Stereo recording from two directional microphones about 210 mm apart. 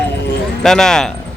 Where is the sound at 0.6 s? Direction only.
5° left (ahead or behind).